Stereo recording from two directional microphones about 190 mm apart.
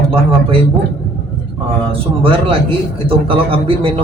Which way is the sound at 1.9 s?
30° right (ahead or behind).